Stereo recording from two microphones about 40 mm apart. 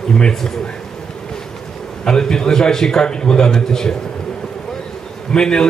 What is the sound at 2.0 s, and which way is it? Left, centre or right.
A man's voice, centre.